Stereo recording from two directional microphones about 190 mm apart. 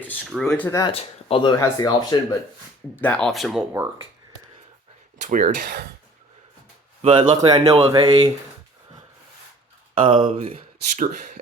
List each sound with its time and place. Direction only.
0.3 s speech: centre (ahead or behind)
0.8 s speech: 30° left (ahead or behind)
2.9 s speech: 10° left (ahead or behind)
5.2 s speech: 45° right (ahead or behind)
7.0 s speech: 25° right (ahead or behind)
10.0 s speech: 25° right (ahead or behind); by 11.3 s 45° right (ahead or behind)